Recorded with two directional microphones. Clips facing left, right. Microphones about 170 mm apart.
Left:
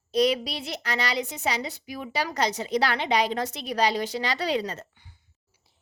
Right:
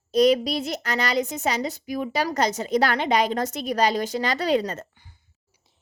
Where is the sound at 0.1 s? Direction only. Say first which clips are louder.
Right 5 dB; 45° right (ahead or behind).